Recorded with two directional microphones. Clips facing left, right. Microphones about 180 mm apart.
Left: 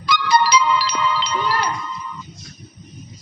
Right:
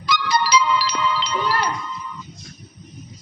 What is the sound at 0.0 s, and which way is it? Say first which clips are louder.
Music: left 4 dB; 55° left (ahead or behind).